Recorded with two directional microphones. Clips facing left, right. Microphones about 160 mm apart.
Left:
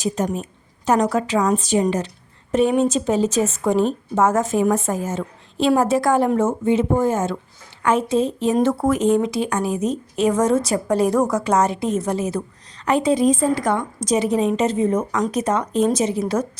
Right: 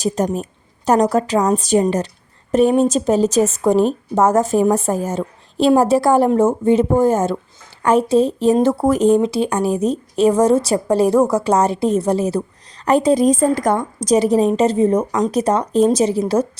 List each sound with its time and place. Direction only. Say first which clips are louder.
0.2 s a woman's voice: right 4 dB; 40° right (ahead or behind)